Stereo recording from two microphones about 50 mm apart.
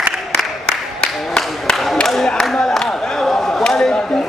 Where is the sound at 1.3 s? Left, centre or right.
Centre.